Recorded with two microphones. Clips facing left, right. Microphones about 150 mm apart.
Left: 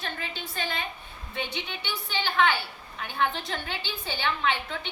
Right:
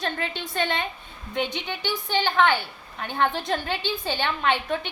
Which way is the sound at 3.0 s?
60° right (ahead or behind).